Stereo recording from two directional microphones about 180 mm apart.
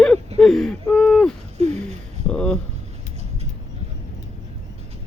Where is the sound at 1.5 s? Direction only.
35° right (ahead or behind).